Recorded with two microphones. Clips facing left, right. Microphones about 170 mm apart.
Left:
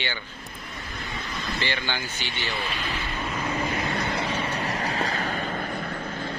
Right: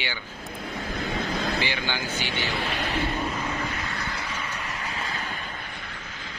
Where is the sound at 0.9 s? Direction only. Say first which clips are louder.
Right 6 dB; 55° right (ahead or behind).